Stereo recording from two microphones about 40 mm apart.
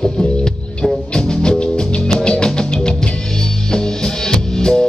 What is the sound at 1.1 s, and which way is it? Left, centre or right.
Music, left.